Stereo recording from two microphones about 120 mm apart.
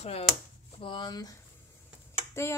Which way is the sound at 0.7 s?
45° left (ahead or behind).